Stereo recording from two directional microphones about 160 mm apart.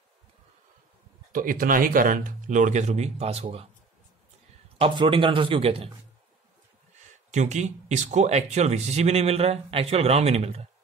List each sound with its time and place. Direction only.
1.3 s speech: 60° right (ahead or behind); by 3.6 s 40° right (ahead or behind)
4.7 s speech: 35° right (ahead or behind)
7.2 s speech: 45° right (ahead or behind)